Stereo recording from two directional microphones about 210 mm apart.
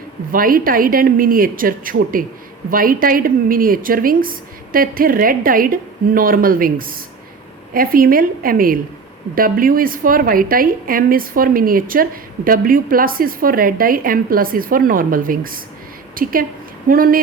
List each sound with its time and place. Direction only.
0.3 s a woman's voice: 45° right (ahead or behind)